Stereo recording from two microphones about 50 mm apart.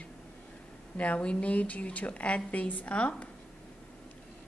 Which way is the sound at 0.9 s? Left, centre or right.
Left.